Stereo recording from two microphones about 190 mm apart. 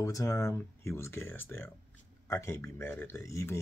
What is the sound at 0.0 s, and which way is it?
A man's voice, 20° left (ahead or behind).